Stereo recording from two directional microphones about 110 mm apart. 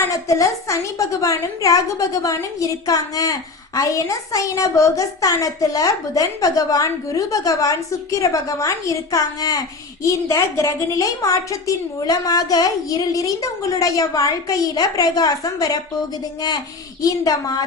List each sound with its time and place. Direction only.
0.3 s a woman's voice: 30° left (ahead or behind)
17.0 s a woman's voice: 35° left (ahead or behind)